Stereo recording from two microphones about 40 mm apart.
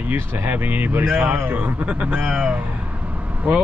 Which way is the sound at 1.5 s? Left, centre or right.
Right.